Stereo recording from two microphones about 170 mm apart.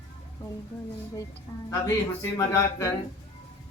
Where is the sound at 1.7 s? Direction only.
15° left (ahead or behind).